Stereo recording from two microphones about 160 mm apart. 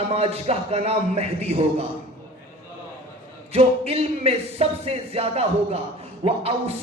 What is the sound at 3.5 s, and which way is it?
A man's voice, 40° right (ahead or behind).